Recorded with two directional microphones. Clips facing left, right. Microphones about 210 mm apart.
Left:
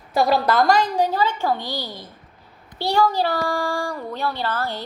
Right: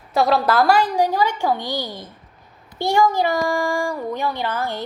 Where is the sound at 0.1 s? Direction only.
Centre (ahead or behind).